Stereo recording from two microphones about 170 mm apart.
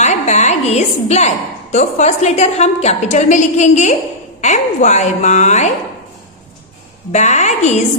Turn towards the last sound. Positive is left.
turn(degrees=45)  # may be behind; listen again after turning